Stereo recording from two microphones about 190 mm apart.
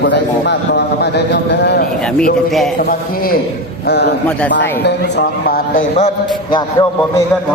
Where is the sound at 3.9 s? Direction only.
60° left (ahead or behind).